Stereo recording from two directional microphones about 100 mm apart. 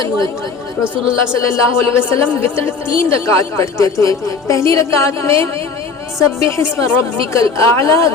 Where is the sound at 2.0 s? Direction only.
25° left (ahead or behind).